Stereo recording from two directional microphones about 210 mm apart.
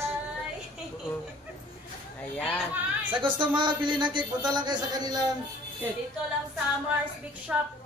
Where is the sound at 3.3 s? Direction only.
20° right (ahead or behind).